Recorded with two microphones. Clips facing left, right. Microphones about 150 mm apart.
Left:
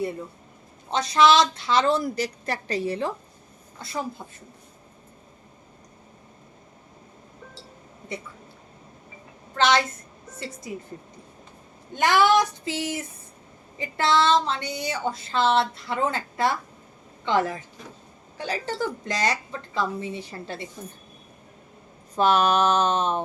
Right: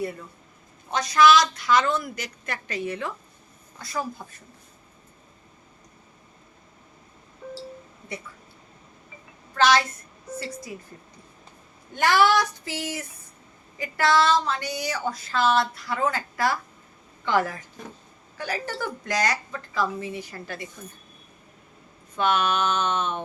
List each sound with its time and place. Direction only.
0.9 s a woman's voice: 25° left (ahead or behind)
9.6 s speech: 20° left (ahead or behind)
11.9 s speech: 20° left (ahead or behind)
22.1 s a woman's voice: 35° left (ahead or behind)